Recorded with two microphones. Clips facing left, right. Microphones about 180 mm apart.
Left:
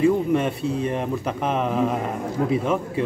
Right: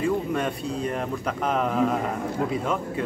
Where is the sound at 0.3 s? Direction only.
25° left (ahead or behind).